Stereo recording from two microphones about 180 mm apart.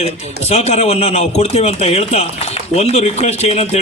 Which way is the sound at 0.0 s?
35° left (ahead or behind).